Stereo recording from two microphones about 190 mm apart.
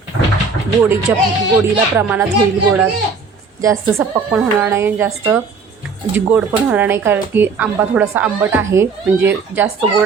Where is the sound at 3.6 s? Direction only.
15° right (ahead or behind).